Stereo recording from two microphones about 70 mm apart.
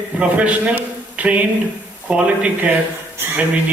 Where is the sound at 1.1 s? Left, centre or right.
Centre.